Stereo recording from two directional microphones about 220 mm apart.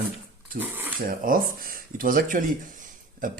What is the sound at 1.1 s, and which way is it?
Speech, 40° right (ahead or behind).